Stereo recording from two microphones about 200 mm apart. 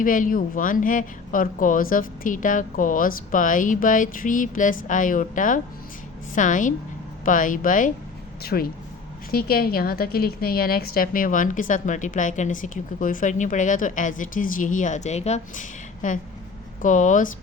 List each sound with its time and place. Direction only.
0.0 s a woman's voice: 45° left (ahead or behind)
8.5 s a woman's voice: 50° left (ahead or behind)